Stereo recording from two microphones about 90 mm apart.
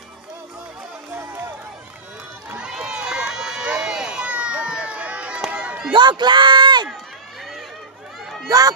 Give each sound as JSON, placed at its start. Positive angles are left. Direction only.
{"t": 2.5, "sound": "run", "side_deg": -10}
{"t": 5.9, "sound": "a man's voice", "side_deg": -55}
{"t": 8.5, "sound": "speech", "side_deg": -40}